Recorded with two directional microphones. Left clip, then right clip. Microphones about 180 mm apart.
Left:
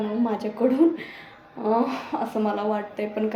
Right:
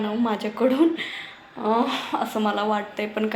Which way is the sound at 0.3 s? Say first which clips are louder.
Right 2 dB; 5° right (ahead or behind).